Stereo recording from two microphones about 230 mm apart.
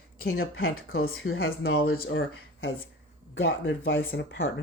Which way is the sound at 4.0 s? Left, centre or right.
Left.